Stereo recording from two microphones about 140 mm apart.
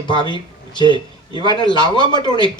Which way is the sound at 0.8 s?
35° left (ahead or behind).